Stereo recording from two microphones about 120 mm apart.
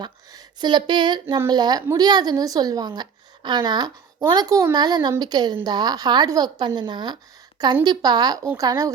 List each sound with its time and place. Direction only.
0.0 s a woman's voice: 35° right (ahead or behind)